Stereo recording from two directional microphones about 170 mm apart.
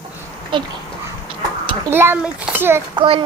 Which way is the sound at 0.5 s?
30° right (ahead or behind).